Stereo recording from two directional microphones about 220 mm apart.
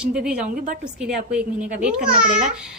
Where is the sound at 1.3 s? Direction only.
5° right (ahead or behind).